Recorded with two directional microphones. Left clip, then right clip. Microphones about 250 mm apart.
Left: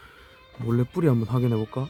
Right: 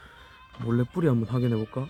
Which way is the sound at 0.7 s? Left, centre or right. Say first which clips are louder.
Left 2 dB; centre.